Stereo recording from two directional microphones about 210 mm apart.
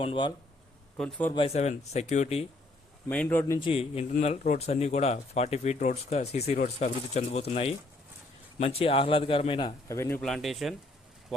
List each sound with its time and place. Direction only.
0.0 s a man's voice: 25° left (ahead or behind)
0.9 s a man's voice: 5° left (ahead or behind)
1.4 s speech: 30° left (ahead or behind)
3.1 s speech: 10° left (ahead or behind)
3.6 s a man's voice: 25° left (ahead or behind); by 10.8 s centre (ahead or behind)